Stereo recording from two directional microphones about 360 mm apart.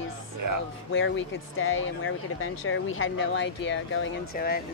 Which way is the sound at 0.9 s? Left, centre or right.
Left.